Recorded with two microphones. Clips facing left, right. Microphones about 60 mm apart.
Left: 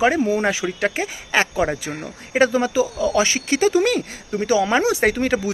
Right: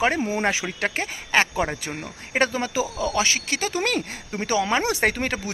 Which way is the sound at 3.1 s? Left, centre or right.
Left.